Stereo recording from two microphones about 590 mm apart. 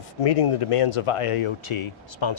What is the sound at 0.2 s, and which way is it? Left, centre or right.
Speech, left.